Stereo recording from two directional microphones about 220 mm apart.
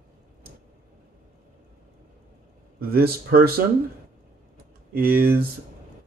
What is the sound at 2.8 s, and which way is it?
Speech, 45° right (ahead or behind).